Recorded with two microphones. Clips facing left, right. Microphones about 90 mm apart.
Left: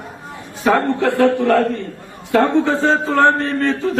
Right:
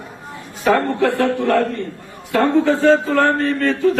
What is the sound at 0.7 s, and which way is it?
Speech, 20° left (ahead or behind).